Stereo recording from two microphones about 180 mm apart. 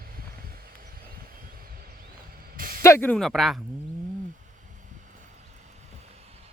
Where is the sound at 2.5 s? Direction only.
50° right (ahead or behind).